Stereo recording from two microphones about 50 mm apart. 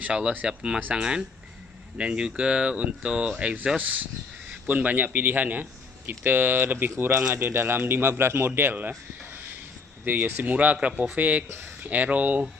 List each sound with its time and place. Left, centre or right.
0.0 s speech: right
3.7 s a man's voice: right
10.0 s speech: right